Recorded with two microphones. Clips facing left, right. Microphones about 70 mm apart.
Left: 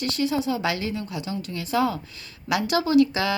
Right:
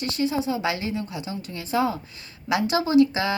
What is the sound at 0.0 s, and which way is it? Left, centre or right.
A woman's voice, right.